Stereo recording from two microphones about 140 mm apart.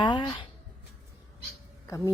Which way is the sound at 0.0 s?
35° left (ahead or behind).